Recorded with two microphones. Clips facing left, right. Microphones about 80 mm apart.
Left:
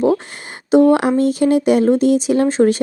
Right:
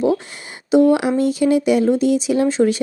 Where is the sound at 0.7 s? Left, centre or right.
Left.